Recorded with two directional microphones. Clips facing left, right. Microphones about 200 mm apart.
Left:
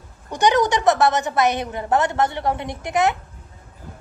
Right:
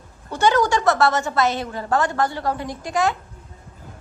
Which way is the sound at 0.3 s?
15° left (ahead or behind).